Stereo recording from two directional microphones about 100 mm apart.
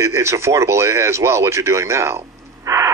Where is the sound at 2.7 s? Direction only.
35° right (ahead or behind).